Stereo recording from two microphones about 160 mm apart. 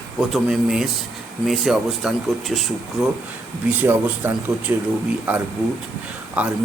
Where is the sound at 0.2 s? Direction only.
Centre (ahead or behind).